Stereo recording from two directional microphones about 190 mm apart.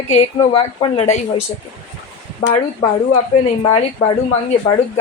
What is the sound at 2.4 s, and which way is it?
A woman's voice, 25° left (ahead or behind).